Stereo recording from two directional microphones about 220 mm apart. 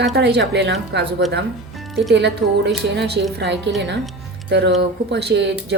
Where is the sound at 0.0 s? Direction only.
50° right (ahead or behind).